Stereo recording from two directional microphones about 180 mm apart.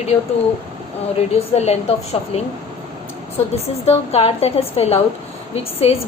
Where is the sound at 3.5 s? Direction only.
35° left (ahead or behind).